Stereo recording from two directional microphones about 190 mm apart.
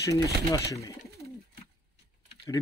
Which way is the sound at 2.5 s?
15° left (ahead or behind).